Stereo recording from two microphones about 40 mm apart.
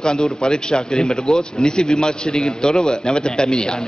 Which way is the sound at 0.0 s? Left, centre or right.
Centre.